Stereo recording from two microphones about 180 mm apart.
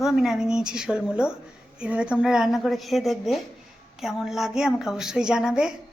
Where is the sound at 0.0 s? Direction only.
Centre (ahead or behind).